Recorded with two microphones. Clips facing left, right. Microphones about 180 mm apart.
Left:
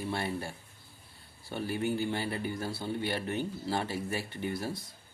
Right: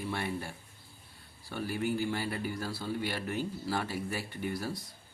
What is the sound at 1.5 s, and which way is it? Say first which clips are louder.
Speech: left 1 dB; 25° left (ahead or behind).